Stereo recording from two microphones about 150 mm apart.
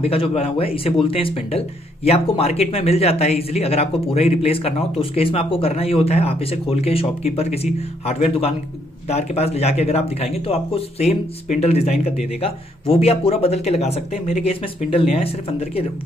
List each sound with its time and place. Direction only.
0.0 s speech: 40° left (ahead or behind)